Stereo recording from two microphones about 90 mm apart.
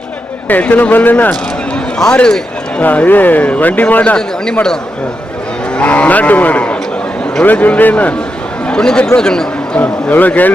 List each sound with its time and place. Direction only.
0.4 s a man's voice: 15° left (ahead or behind)